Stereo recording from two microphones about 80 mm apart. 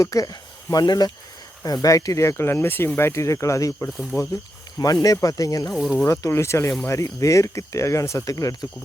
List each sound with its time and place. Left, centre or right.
0.0 s speech: left
4.1 s speech: left
5.7 s speech: centre
6.1 s speech: left